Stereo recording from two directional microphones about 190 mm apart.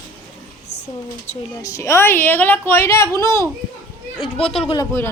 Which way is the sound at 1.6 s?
15° left (ahead or behind).